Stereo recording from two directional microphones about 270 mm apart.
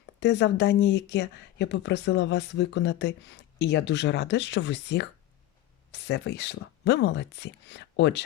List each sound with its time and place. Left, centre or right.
0.2 s speech: left